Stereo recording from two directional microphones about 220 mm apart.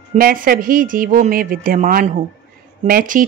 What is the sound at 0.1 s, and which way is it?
Speech, 40° right (ahead or behind).